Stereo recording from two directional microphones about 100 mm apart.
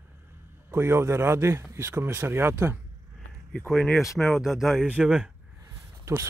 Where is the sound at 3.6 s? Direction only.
Centre (ahead or behind).